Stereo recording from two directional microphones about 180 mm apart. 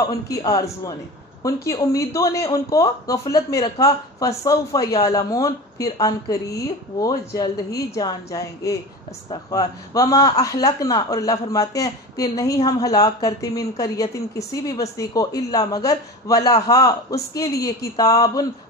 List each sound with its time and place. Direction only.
0.3 s a woman's voice: 20° left (ahead or behind)